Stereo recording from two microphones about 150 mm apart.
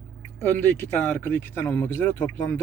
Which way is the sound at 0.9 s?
10° left (ahead or behind).